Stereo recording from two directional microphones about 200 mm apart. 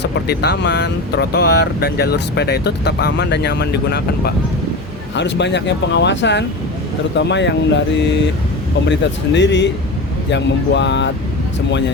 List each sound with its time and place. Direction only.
0.0 s speech: 55° left (ahead or behind)
5.1 s speech: 60° left (ahead or behind)